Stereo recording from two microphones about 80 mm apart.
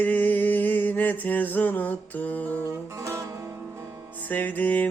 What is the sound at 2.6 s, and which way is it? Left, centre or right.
Music, right.